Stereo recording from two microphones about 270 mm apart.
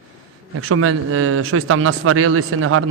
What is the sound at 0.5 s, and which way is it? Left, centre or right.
Speech, right.